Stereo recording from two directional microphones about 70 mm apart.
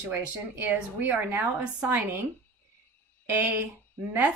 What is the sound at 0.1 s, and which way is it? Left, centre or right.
Speech, right.